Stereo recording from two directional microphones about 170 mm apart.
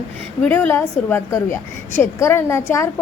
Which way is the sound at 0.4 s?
10° left (ahead or behind).